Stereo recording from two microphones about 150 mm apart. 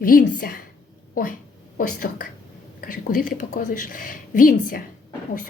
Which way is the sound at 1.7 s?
65° left (ahead or behind).